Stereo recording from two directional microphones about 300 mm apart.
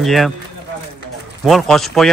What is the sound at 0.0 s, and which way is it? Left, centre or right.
Speech, centre.